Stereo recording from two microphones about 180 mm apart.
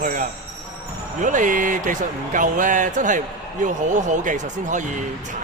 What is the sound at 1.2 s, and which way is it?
Speech, 45° right (ahead or behind).